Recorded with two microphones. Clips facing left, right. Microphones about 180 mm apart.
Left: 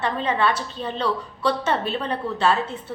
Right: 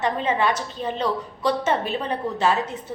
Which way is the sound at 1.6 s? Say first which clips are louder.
Right 1 dB; 20° right (ahead or behind).